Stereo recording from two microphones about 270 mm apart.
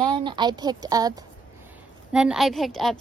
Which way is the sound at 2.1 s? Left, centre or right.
Centre.